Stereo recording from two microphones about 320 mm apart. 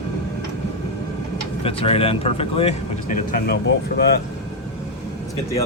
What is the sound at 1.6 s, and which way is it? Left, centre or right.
Speech, centre.